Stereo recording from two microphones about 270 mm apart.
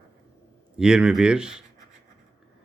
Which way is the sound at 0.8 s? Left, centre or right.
Centre.